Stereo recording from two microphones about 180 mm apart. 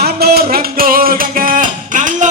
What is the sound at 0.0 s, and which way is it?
Music, 60° right (ahead or behind).